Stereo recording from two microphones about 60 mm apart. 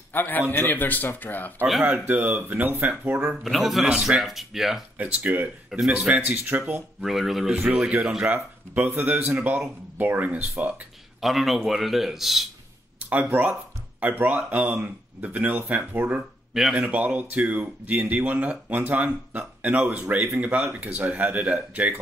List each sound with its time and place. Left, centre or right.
0.1 s a man's voice: left
1.9 s speech: right
3.4 s speech: centre
4.9 s speech: right
5.9 s speech: centre
6.5 s speech: right
7.0 s speech: centre
7.5 s speech: right
8.3 s speech: right
11.1 s speech: centre
13.1 s speech: right